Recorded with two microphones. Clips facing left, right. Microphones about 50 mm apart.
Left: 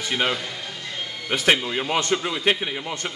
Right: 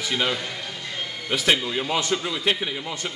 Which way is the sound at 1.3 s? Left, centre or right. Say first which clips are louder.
Left 2 dB; left.